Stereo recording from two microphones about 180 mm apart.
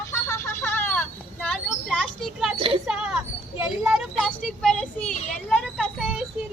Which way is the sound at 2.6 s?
30° right (ahead or behind).